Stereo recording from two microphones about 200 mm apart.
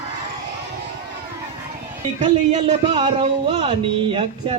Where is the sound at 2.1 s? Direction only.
35° right (ahead or behind).